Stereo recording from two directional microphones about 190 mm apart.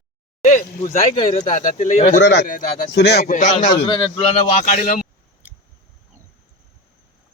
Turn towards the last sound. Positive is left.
turn(degrees=-10)  # may be behind; listen again after turning